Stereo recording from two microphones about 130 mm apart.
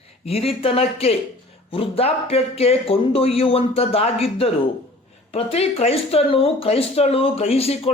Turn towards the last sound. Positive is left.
turn(degrees=50)  # may be behind; listen again after turning